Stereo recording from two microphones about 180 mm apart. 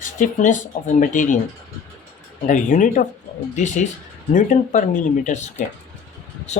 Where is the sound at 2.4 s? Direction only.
45° left (ahead or behind).